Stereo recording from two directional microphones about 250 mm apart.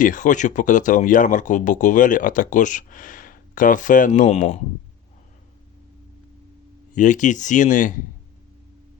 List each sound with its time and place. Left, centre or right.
0.0 s speech: left
6.9 s speech: left